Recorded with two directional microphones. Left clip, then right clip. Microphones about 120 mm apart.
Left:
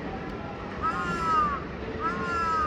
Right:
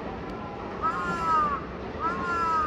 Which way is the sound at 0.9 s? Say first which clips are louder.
Right 1 dB; 55° right (ahead or behind).